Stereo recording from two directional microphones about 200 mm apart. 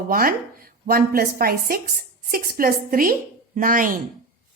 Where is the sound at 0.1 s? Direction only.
45° right (ahead or behind).